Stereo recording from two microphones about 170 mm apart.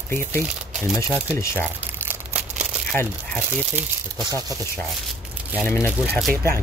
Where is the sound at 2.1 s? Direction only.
10° right (ahead or behind).